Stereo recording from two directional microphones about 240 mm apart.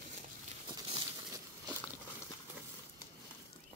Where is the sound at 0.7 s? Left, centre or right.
Centre.